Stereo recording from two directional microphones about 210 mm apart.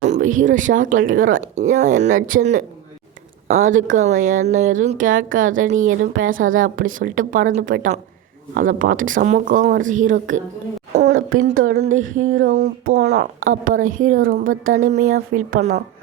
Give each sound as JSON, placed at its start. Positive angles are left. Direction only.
{"t": 0.0, "sound": "speech", "side_deg": -35}
{"t": 11.6, "sound": "speech", "side_deg": -60}
{"t": 12.1, "sound": "speech", "side_deg": -40}